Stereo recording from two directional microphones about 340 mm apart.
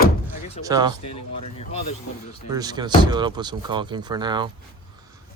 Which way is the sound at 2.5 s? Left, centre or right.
Centre.